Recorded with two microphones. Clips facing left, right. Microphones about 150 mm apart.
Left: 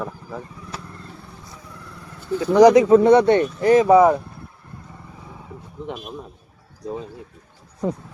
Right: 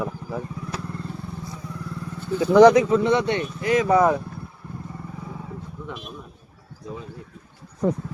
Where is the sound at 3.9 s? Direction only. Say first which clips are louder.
Left 4 dB; 5° left (ahead or behind).